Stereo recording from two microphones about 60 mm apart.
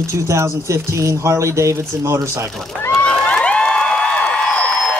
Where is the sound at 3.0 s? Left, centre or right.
Centre.